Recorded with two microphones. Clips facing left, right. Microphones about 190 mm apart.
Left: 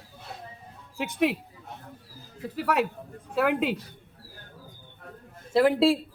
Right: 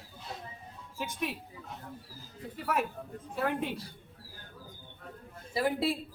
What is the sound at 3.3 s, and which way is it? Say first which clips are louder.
Speech: left 7 dB; 90° left.